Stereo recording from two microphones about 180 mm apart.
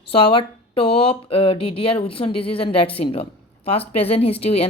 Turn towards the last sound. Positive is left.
turn(degrees=35)  # may be behind; listen again after turning